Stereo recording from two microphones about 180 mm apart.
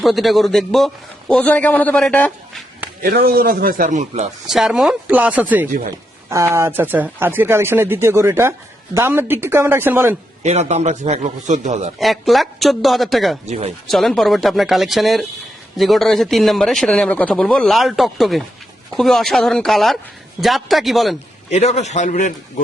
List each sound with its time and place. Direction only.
0.0 s a man's voice: centre (ahead or behind)
3.0 s a man's voice: 55° right (ahead or behind)
4.4 s speech: centre (ahead or behind)
10.4 s a man's voice: 40° right (ahead or behind)
11.9 s speech: centre (ahead or behind)
13.4 s a man's voice: 40° right (ahead or behind)
13.9 s speech: centre (ahead or behind)
21.5 s a man's voice: 40° left (ahead or behind)